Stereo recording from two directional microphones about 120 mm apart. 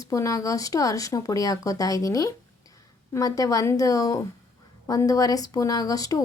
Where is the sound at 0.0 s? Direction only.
30° left (ahead or behind).